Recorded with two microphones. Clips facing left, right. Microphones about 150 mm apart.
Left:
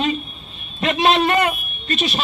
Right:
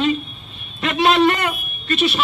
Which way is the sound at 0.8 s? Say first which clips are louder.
Right 2 dB; 25° left (ahead or behind).